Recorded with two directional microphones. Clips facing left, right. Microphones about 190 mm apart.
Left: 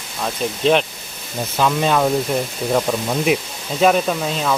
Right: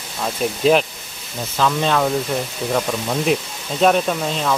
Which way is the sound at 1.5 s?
10° left (ahead or behind).